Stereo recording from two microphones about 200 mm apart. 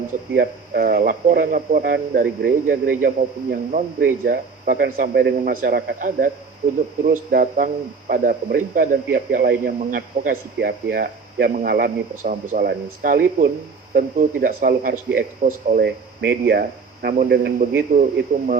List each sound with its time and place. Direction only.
0.3 s speech: 50° right (ahead or behind)